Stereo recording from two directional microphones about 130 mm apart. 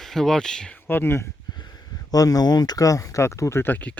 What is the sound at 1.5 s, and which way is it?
Speech, 30° left (ahead or behind).